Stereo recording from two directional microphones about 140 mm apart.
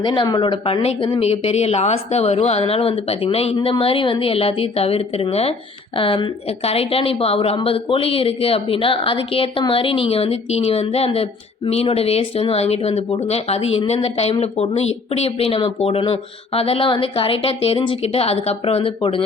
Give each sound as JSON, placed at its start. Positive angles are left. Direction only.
{"t": 0.0, "sound": "a woman's voice", "side_deg": 30}